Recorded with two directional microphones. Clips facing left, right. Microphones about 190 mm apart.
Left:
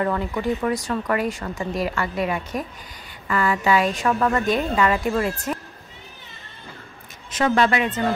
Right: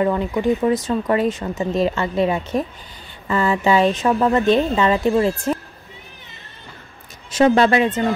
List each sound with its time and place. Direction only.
0.0 s a woman's voice: 20° right (ahead or behind)
7.3 s speech: 30° right (ahead or behind)